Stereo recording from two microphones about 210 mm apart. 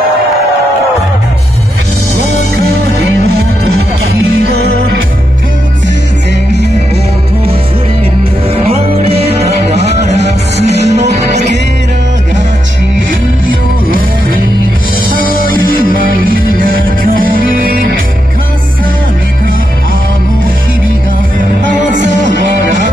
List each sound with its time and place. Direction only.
8.6 s music: 30° right (ahead or behind)
9.9 s music: 50° right (ahead or behind)
10.9 s music: 30° right (ahead or behind)
13.8 s music: 40° right (ahead or behind)
15.1 s music: 45° left (ahead or behind)
16.5 s music: 40° right (ahead or behind)